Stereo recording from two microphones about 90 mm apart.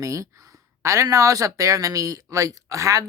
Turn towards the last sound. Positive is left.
turn(degrees=-35)  # may be behind; listen again after turning